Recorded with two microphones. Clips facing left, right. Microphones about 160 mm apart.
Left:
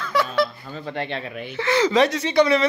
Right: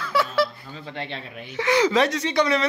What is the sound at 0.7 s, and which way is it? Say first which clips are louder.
Speech: left 5 dB; 50° left (ahead or behind).